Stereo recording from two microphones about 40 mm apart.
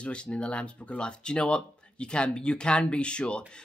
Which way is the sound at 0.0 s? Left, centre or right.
Left.